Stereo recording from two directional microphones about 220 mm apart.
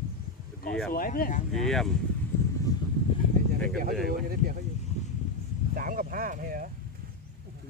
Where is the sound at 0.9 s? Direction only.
40° left (ahead or behind).